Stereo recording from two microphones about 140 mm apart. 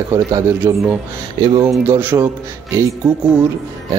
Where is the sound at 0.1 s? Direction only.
20° right (ahead or behind).